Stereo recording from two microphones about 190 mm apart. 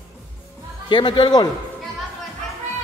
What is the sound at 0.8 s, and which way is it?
Speech, 25° left (ahead or behind).